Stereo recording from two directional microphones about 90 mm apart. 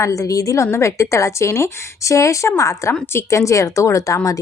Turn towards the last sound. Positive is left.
turn(degrees=40)  # may be behind; listen again after turning